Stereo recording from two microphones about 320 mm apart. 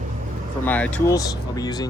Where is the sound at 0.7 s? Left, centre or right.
Centre.